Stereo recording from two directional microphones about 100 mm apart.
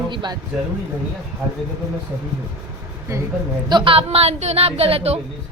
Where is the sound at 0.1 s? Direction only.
50° right (ahead or behind).